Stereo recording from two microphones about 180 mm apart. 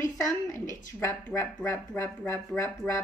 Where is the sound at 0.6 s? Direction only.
45° left (ahead or behind).